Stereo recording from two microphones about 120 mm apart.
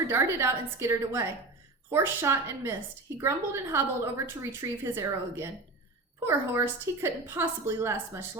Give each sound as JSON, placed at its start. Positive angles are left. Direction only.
{"t": 0.1, "sound": "a woman's voice", "side_deg": -20}